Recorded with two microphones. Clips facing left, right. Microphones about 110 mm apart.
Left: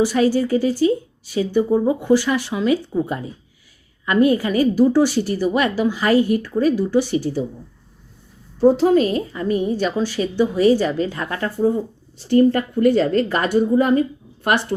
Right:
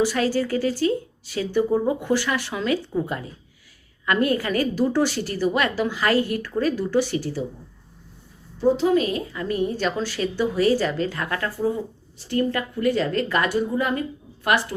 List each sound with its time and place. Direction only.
0.0 s a woman's voice: 15° left (ahead or behind)
8.6 s a woman's voice: 40° left (ahead or behind)
9.6 s a woman's voice: 15° left (ahead or behind)